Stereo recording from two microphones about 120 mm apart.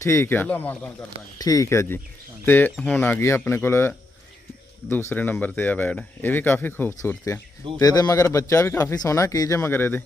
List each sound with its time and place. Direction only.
0.0 s speech: 20° left (ahead or behind)
1.4 s speech: 30° left (ahead or behind)